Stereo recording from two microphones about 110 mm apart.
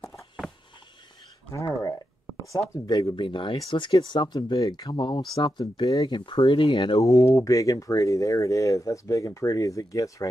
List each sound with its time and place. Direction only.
0.0 s walk: centre (ahead or behind)
1.5 s a sound: 30° left (ahead or behind)
2.7 s speech: 35° left (ahead or behind)
3.2 s speech: 50° left (ahead or behind)
7.0 s speech: 30° left (ahead or behind)